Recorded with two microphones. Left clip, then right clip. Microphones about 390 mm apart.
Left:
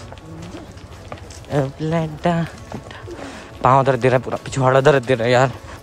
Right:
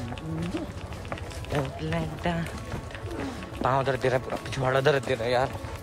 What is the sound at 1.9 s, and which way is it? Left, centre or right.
Speech, centre.